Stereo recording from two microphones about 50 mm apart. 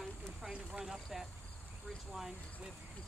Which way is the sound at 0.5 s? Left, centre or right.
Centre.